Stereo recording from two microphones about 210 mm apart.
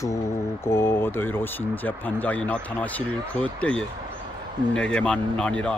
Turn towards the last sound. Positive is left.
turn(degrees=5)  # may be behind; listen again after turning